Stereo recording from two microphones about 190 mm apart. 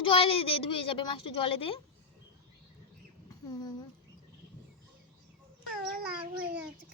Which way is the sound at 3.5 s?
20° left (ahead or behind).